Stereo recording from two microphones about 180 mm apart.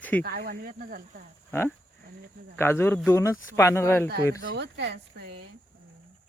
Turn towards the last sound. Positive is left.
turn(degrees=-70)  # may be behind; listen again after turning